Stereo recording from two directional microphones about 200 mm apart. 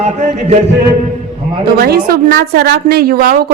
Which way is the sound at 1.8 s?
50° right (ahead or behind).